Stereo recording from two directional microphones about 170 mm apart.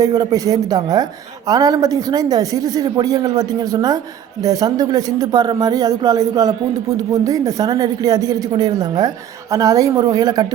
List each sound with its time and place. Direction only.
0.0 s speech: 20° right (ahead or behind)